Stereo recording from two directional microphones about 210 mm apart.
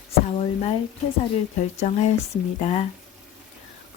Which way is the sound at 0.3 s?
30° left (ahead or behind).